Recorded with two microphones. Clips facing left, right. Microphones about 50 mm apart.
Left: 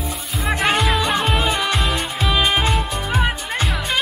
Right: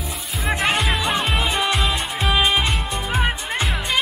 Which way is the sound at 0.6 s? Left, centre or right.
Centre.